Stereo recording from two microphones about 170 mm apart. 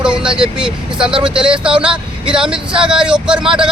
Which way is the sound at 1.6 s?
5° right (ahead or behind).